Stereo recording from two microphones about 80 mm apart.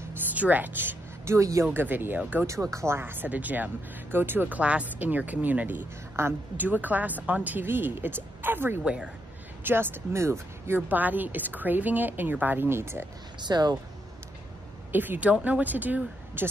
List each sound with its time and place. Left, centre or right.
0.3 s a sound: right
1.3 s speech: right; by 2.4 s centre
2.4 s speech: right
8.8 s speech: centre
9.6 s speech: right
10.9 s speech: right
13.4 s speech: right
14.9 s speech: right